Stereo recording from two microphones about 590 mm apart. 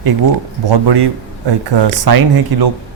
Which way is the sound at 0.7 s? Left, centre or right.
Right.